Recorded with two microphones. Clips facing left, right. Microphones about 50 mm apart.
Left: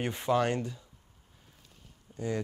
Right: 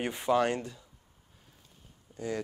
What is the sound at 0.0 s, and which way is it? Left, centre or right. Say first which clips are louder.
Speech: right 1 dB; centre.